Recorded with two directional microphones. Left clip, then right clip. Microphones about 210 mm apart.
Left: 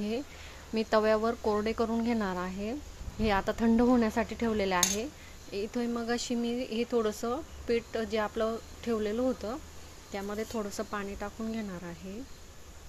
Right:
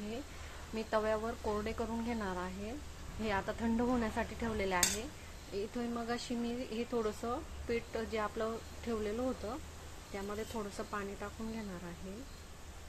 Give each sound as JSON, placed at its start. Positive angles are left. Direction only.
{"t": 0.7, "sound": "a woman's voice", "side_deg": 50}